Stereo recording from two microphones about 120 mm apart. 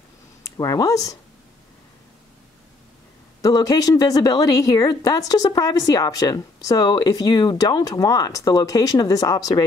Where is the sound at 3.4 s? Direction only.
30° left (ahead or behind).